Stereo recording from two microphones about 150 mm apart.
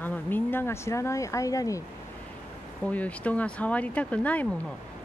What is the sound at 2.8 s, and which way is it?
Speech, 10° left (ahead or behind).